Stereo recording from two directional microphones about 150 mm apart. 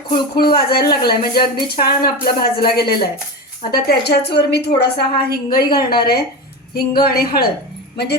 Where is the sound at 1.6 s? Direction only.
90° left.